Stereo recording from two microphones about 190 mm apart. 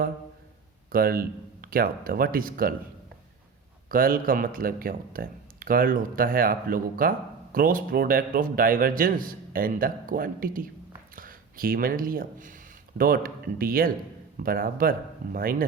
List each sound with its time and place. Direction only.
0.9 s speech: 50° right (ahead or behind)
3.8 s speech: 50° right (ahead or behind)